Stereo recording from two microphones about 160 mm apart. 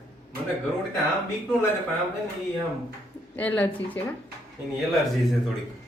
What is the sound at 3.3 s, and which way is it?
Speech, 10° left (ahead or behind).